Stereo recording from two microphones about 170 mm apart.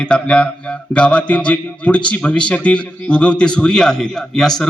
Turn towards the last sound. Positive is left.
turn(degrees=0)  # may be behind; listen again after turning